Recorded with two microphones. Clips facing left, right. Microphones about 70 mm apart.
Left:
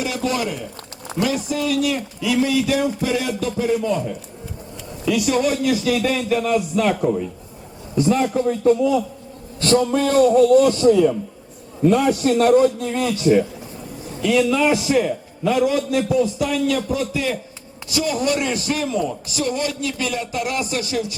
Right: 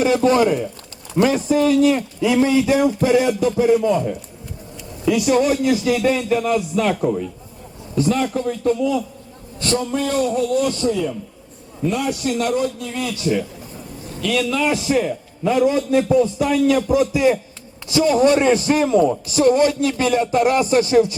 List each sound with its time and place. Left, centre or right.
0.0 s a man's voice: right; by 7.3 s centre
7.9 s a man's voice: centre
8.6 s a man's voice: left
9.6 s a man's voice: left
14.2 s a man's voice: centre
15.6 s a man's voice: right
17.9 s a man's voice: right